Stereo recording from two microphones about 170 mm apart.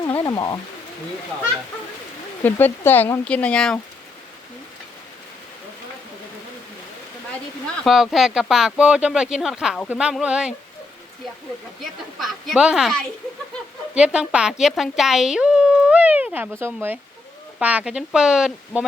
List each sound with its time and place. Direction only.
0.3 s speech: 20° left (ahead or behind)
2.4 s speech: 10° left (ahead or behind)
7.9 s a woman's voice: centre (ahead or behind)
12.2 s a woman's voice: centre (ahead or behind)